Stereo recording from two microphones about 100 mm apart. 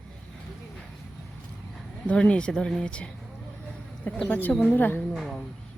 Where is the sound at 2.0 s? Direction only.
10° left (ahead or behind).